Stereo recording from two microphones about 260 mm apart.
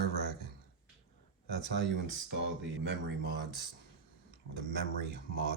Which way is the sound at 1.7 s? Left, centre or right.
Right.